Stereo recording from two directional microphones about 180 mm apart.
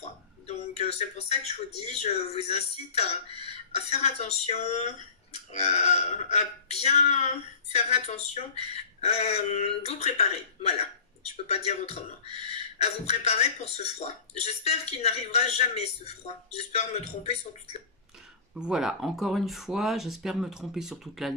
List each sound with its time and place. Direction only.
0.0 s a sound: 35° left (ahead or behind)
1.9 s speech: 35° left (ahead or behind)
18.5 s speech: 5° right (ahead or behind)